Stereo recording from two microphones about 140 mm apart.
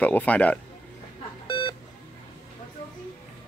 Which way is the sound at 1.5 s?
35° left (ahead or behind).